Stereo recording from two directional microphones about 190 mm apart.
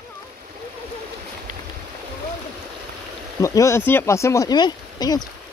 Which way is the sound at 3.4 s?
15° left (ahead or behind).